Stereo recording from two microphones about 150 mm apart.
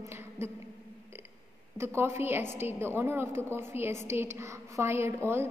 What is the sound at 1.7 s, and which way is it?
A woman's voice, 15° right (ahead or behind).